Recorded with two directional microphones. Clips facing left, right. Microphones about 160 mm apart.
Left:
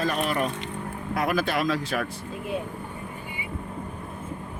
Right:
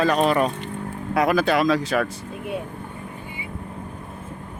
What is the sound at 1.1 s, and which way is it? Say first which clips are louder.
Speech: right 6 dB; 90° right.